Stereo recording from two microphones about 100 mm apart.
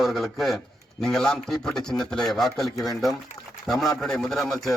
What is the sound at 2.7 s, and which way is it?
Speech, 35° left (ahead or behind).